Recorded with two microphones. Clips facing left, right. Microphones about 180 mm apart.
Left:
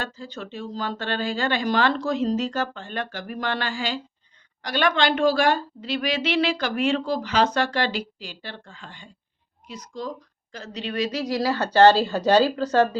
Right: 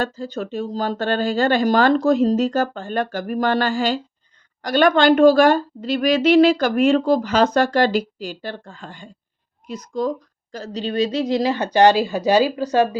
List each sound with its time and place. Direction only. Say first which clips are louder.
0.0 s a woman's voice: right 8 dB; 45° right (ahead or behind)
10.5 s speech: right 6 dB; 35° right (ahead or behind); by 13.0 s 10° right (ahead or behind)